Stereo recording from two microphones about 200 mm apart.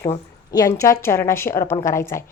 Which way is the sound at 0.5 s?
15° left (ahead or behind).